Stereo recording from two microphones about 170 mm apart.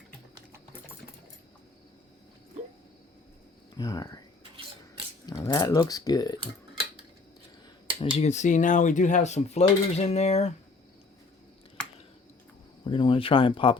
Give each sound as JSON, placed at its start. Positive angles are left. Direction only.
{"t": 3.8, "sound": "speech", "side_deg": 25}
{"t": 5.2, "sound": "speech", "side_deg": 20}
{"t": 8.1, "sound": "speech", "side_deg": 40}
{"t": 12.8, "sound": "speech", "side_deg": 25}